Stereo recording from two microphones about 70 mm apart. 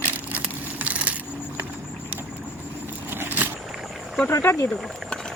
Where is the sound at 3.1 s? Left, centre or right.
Right.